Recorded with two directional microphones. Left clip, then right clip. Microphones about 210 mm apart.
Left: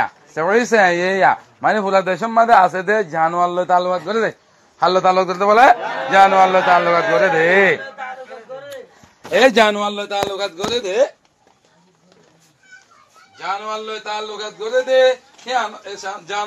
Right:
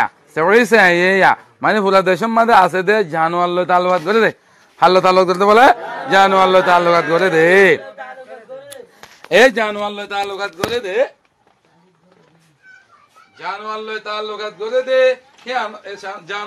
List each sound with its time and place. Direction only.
0.0 s speech: 65° right (ahead or behind)
9.8 s speech: 5° right (ahead or behind)
10.3 s speech: 5° left (ahead or behind)
13.4 s a man's voice: 15° right (ahead or behind)